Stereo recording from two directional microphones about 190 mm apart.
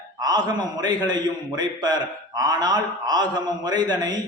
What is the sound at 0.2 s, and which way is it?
A man's voice, 20° right (ahead or behind).